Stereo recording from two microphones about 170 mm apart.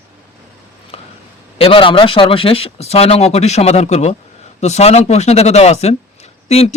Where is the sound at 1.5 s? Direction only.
35° left (ahead or behind).